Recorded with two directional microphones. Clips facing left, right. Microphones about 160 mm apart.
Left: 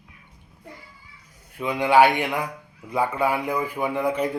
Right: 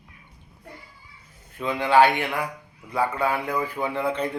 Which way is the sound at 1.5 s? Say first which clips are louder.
Left 1 dB; 15° left (ahead or behind).